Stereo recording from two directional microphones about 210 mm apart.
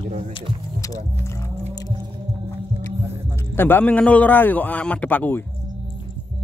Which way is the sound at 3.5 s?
10° left (ahead or behind).